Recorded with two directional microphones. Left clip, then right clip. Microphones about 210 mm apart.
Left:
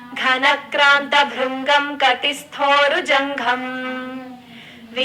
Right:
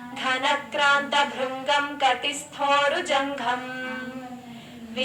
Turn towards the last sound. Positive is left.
turn(degrees=20)  # may be behind; listen again after turning